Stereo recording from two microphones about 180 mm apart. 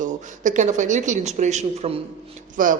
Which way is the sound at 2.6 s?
50° right (ahead or behind).